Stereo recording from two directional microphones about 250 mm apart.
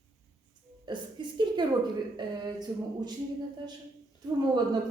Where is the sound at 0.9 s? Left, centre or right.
Centre.